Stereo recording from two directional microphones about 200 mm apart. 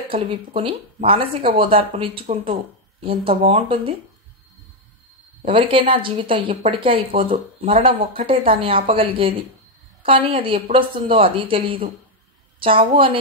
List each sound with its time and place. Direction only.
0.1 s a woman's voice: 30° right (ahead or behind)
5.4 s a woman's voice: 25° right (ahead or behind)